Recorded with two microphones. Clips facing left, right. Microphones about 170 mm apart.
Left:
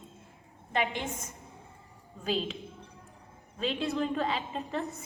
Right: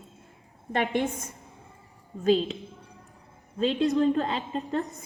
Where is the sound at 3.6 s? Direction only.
40° right (ahead or behind).